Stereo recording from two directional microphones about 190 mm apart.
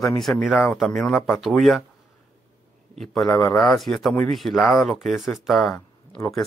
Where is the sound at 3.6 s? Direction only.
5° left (ahead or behind).